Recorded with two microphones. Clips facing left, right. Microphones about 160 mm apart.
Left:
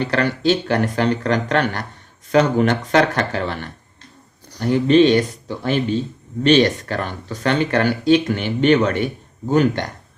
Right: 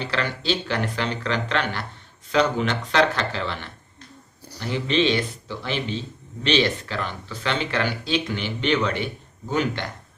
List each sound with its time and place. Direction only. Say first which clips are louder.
0.0 s speech: left 8 dB; 50° left (ahead or behind)